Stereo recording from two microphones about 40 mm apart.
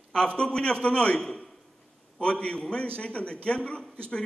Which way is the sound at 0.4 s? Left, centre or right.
Left.